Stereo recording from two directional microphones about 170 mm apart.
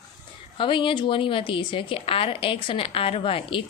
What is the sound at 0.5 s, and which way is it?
A woman's voice, 30° left (ahead or behind).